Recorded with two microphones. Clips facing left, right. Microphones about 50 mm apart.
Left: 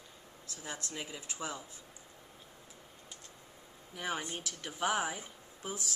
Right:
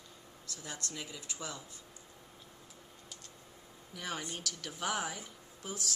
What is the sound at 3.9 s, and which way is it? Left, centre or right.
Speech, left.